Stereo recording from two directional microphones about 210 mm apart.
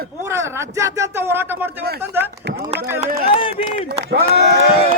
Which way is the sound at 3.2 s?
25° left (ahead or behind).